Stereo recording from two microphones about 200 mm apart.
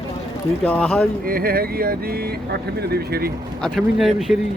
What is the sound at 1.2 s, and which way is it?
Speech, 45° right (ahead or behind).